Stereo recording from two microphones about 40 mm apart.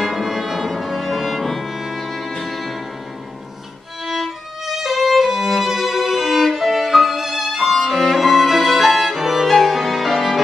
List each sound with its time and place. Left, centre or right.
0.0 s music: centre
4.0 s violin: centre
9.3 s music: centre